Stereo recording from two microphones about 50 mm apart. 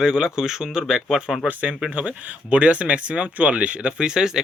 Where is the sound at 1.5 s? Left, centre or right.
Right.